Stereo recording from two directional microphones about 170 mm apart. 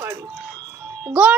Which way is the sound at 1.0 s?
10° right (ahead or behind).